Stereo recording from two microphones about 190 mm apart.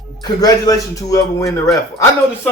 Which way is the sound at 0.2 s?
20° left (ahead or behind).